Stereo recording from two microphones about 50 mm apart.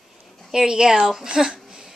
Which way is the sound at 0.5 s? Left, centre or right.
Centre.